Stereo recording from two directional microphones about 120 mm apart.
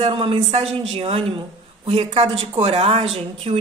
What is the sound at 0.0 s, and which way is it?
A woman's voice, 50° right (ahead or behind).